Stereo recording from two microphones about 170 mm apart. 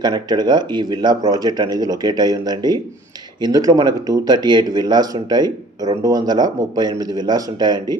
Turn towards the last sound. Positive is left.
turn(degrees=-25)  # may be behind; listen again after turning